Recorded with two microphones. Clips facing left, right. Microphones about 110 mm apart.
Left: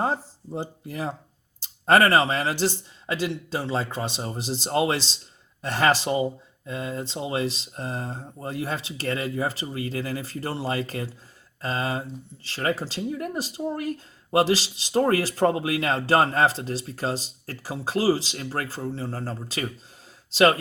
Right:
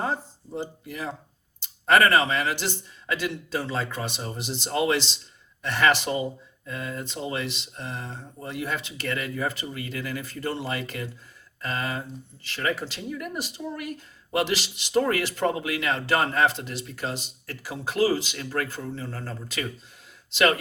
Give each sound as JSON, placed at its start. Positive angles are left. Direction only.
{"t": 0.0, "sound": "speech", "side_deg": 30}